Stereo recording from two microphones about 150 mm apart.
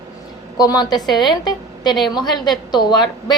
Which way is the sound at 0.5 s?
25° left (ahead or behind).